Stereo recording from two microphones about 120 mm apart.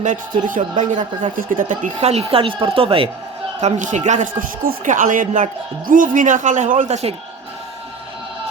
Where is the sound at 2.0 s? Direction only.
60° right (ahead or behind).